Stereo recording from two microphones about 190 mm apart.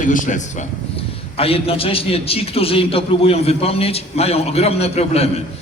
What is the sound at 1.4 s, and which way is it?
A man's voice, 30° left (ahead or behind).